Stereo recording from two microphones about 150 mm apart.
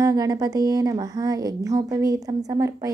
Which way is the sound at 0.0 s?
25° right (ahead or behind).